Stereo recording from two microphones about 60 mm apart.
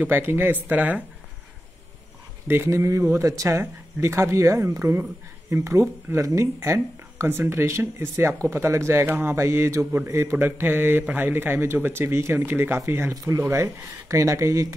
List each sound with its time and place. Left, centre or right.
0.0 s speech: right
2.4 s speech: right
2.7 s speech: right
9.0 s speech: right
10.3 s speech: right
13.1 s speech: right
13.4 s speech: right